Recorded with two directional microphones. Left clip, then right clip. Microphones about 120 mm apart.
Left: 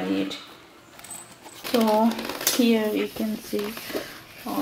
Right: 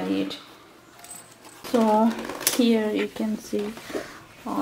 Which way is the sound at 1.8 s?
25° right (ahead or behind).